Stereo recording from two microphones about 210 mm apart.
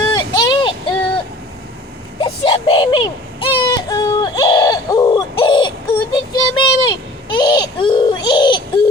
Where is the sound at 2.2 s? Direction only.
25° left (ahead or behind).